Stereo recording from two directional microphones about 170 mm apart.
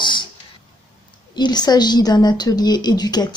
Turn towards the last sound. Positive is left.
turn(degrees=25)  # may be behind; listen again after turning